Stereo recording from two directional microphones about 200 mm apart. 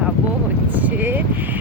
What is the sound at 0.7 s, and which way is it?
Speech, 10° right (ahead or behind).